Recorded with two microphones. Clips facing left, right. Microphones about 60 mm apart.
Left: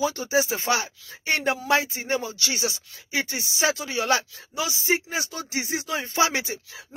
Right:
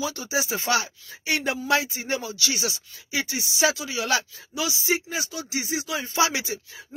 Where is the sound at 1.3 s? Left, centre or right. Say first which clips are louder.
Left 1 dB; left.